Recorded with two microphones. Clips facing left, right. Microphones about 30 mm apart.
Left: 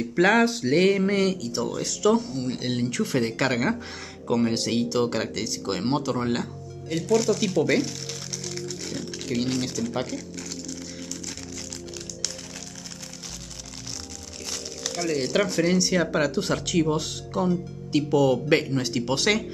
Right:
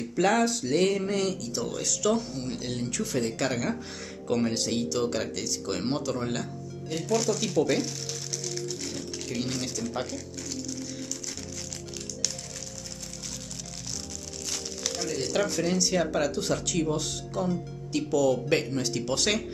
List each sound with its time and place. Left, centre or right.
0.2 s speech: left; by 2.5 s centre
2.5 s speech: left
7.0 s speech: centre
8.9 s speech: left
14.5 s crumpling: centre
15.0 s speech: left
18.6 s speech: centre